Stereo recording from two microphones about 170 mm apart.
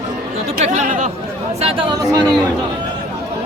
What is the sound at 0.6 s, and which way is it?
Speech, 45° right (ahead or behind).